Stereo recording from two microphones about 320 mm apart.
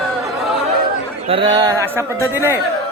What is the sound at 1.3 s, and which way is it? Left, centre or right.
A man's voice, centre.